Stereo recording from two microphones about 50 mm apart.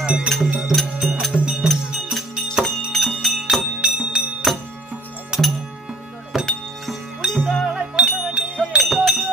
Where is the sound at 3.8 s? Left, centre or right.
Right.